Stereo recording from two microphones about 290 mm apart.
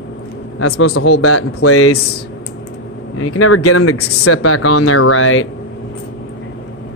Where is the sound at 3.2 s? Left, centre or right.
Left.